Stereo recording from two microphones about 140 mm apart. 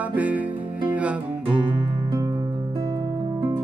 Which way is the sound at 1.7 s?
35° right (ahead or behind).